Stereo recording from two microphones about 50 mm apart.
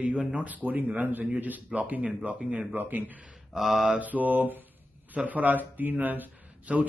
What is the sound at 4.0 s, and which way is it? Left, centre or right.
A man's voice, right.